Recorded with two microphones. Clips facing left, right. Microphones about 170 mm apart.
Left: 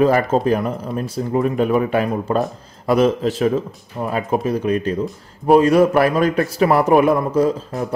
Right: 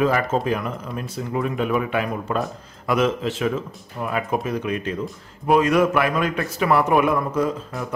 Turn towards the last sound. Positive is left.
turn(degrees=35)  # may be behind; listen again after turning